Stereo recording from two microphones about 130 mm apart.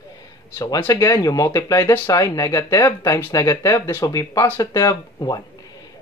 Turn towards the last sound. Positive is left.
turn(degrees=30)  # may be behind; listen again after turning